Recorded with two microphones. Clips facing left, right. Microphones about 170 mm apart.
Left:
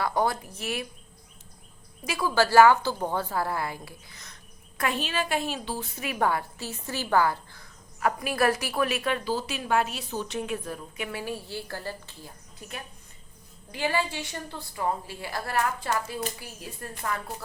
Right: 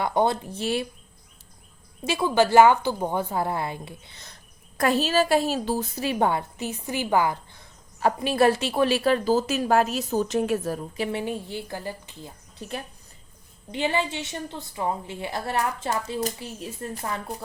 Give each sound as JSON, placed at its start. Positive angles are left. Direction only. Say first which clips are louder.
{"t": 0.0, "sound": "a woman's voice", "louder": "right 3 dB", "side_deg": -25}
{"t": 2.0, "sound": "a woman's voice", "louder": "right 4 dB", "side_deg": -25}
{"t": 12.5, "sound": "a woman's voice", "louder": "right 7 dB", "side_deg": -30}